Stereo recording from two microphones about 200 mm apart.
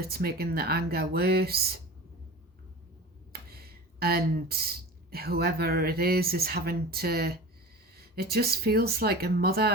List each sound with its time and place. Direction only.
0.0 s speech: 50° right (ahead or behind)
3.5 s speech: 50° right (ahead or behind)